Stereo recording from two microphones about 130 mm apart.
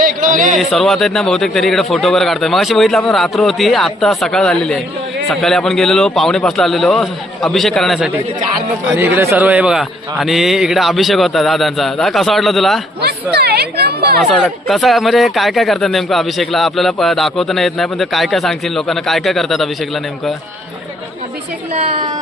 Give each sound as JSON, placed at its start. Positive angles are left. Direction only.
{"t": 0.0, "sound": "speech", "side_deg": -90}
{"t": 0.5, "sound": "speech", "side_deg": 0}
{"t": 8.9, "sound": "speech", "side_deg": -15}
{"t": 14.2, "sound": "speech", "side_deg": 0}